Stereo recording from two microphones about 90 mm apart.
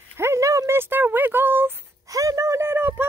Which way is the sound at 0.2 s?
30° right (ahead or behind).